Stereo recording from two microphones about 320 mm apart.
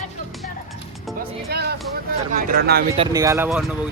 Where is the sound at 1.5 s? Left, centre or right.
Right.